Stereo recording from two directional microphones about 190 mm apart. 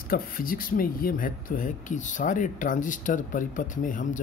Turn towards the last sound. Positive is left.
turn(degrees=45)  # may be behind; listen again after turning